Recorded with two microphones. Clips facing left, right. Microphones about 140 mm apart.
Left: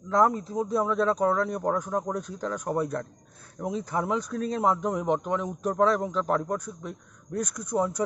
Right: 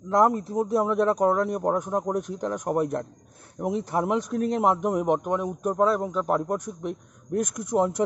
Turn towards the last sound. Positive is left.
turn(degrees=-20)  # may be behind; listen again after turning